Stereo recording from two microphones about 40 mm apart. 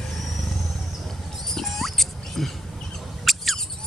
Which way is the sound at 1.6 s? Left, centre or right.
Centre.